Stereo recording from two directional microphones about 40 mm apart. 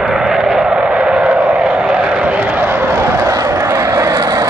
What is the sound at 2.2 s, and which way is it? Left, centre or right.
Vehicle, right.